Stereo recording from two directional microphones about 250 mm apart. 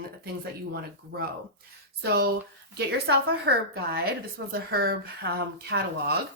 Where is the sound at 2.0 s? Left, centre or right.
Right.